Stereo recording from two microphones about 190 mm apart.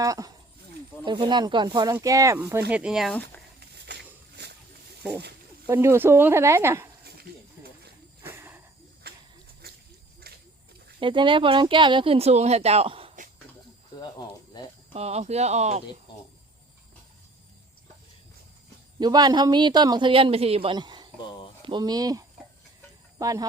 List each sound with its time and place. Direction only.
0.0 s speech: 20° right (ahead or behind); by 3.4 s 5° left (ahead or behind)
3.6 s a sound: 60° right (ahead or behind)
5.6 s speech: 15° right (ahead or behind)
7.0 s snake: 55° right (ahead or behind)
8.2 s a sound: 10° right (ahead or behind)
9.0 s a sound: 55° right (ahead or behind)
11.0 s speech: 25° right (ahead or behind)
14.9 s speech: 35° right (ahead or behind)
18.9 s speech: 20° right (ahead or behind)